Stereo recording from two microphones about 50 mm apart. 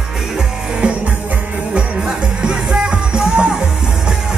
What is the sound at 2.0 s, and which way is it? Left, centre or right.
Music, centre.